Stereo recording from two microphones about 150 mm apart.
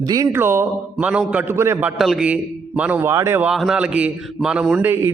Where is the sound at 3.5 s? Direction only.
5° right (ahead or behind).